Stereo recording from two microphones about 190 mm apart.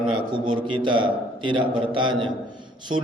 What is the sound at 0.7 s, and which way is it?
A man's voice, 25° right (ahead or behind).